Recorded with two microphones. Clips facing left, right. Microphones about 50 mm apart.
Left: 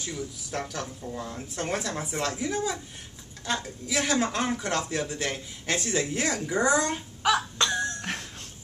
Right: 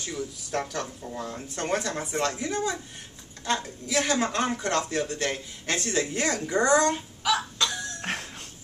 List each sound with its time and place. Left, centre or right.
0.0 s speech: centre
7.2 s a sound: left
8.0 s music: centre